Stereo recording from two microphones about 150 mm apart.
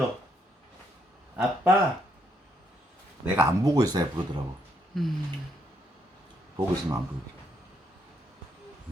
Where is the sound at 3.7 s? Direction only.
25° right (ahead or behind).